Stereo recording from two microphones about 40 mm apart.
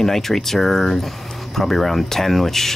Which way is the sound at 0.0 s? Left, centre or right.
Centre.